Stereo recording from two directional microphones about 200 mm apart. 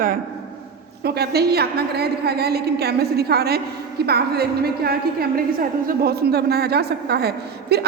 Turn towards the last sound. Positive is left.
turn(degrees=-55)  # may be behind; listen again after turning